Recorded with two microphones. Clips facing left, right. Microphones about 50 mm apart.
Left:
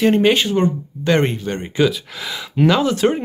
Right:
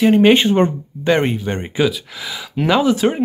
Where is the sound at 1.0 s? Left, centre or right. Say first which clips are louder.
Right 1 dB; centre.